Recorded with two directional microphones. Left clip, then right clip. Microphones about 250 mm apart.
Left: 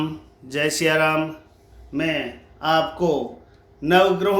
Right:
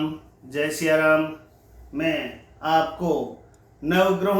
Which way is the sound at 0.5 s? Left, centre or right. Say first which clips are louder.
Left 2 dB; left.